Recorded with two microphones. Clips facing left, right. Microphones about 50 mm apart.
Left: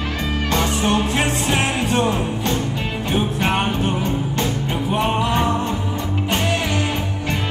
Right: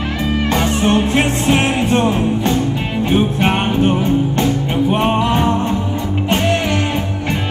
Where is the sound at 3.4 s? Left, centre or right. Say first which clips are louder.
Right 5 dB; right.